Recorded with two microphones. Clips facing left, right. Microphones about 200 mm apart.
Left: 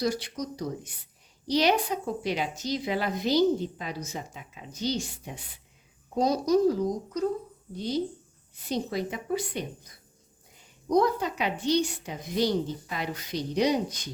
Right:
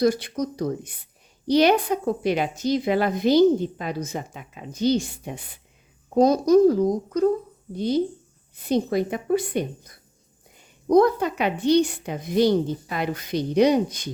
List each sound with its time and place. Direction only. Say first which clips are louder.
0.0 s a woman's voice: right 8 dB; 55° right (ahead or behind)
10.8 s a woman's voice: right 7 dB; 55° right (ahead or behind)